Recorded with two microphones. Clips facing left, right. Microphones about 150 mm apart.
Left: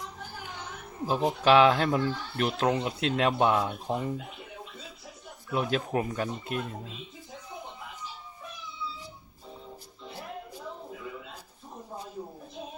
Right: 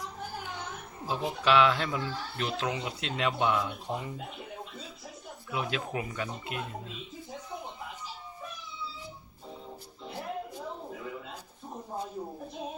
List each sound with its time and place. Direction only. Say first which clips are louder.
1.0 s speech: left 5 dB; 45° left (ahead or behind)
5.5 s speech: left 5 dB; 45° left (ahead or behind)